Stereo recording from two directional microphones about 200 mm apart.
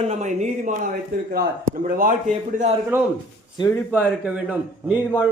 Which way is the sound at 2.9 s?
10° right (ahead or behind).